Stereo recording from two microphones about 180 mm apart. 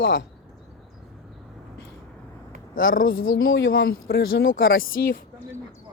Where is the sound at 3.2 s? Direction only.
75° left (ahead or behind); by 5.2 s 55° left (ahead or behind).